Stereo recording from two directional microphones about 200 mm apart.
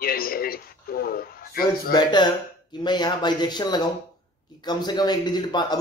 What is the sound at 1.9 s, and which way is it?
A man's voice, 20° left (ahead or behind).